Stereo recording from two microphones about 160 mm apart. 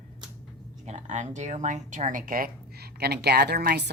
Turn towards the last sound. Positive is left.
turn(degrees=-85)